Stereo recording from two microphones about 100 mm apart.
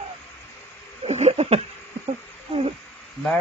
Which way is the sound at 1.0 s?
90° right.